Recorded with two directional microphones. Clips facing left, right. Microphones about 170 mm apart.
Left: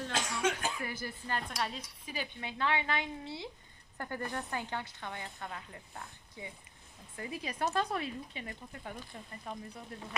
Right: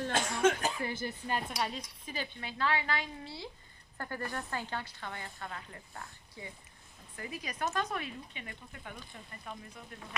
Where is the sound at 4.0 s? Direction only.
15° left (ahead or behind).